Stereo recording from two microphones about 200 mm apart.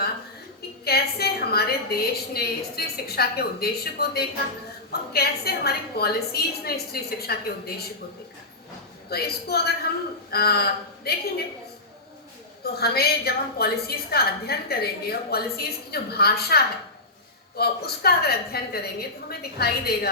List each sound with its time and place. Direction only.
0.9 s a woman's voice: 50° left (ahead or behind)
9.0 s a woman's voice: 50° left (ahead or behind)
12.6 s a woman's voice: 50° left (ahead or behind)